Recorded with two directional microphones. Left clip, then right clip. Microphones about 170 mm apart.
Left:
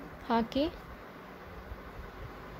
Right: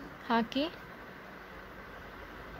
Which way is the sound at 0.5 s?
90° left.